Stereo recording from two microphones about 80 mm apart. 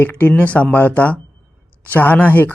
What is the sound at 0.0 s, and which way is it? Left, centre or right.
A man's voice, left.